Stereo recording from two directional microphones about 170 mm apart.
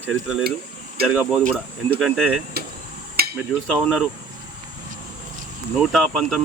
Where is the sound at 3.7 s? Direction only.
Centre (ahead or behind).